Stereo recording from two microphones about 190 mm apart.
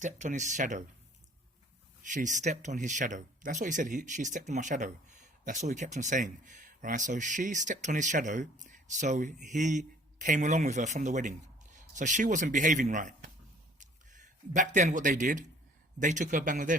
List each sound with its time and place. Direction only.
0.0 s speech: 40° right (ahead or behind)
2.1 s speech: 40° right (ahead or behind)
13.7 s a sound: 40° right (ahead or behind)
16.0 s speech: 40° right (ahead or behind)